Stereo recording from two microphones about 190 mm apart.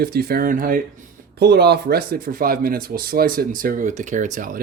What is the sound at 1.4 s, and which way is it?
Speech, 60° right (ahead or behind).